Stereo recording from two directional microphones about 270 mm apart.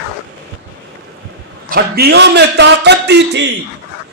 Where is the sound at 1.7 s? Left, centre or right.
Right.